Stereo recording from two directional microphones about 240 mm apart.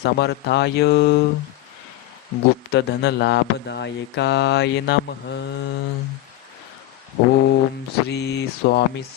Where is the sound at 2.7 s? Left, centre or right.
Left.